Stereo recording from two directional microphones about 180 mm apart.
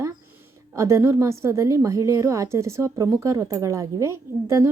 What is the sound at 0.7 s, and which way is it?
A woman's voice, 15° right (ahead or behind).